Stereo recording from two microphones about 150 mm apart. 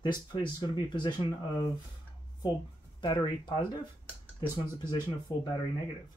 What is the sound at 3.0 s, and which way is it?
Speech, 30° left (ahead or behind).